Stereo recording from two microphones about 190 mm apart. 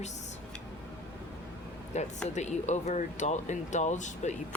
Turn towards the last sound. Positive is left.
turn(degrees=40)  # may be behind; listen again after turning